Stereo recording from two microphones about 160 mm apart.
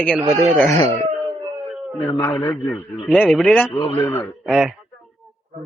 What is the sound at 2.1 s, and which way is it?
Speech, 15° left (ahead or behind).